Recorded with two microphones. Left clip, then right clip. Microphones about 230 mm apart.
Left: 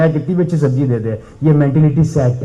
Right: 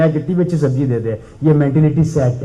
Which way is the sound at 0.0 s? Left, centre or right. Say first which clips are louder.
Left 1 dB; left.